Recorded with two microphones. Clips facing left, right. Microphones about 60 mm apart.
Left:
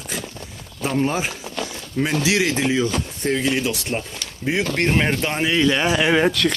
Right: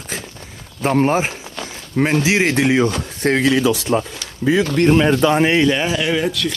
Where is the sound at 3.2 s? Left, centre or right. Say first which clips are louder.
Right 6 dB; right.